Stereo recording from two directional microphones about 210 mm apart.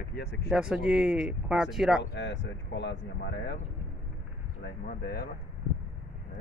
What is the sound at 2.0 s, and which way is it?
Speech, 55° left (ahead or behind).